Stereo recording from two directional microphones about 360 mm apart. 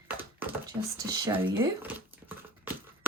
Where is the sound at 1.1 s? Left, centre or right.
Centre.